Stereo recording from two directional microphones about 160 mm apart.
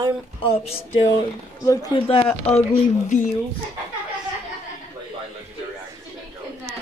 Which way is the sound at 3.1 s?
50° left (ahead or behind).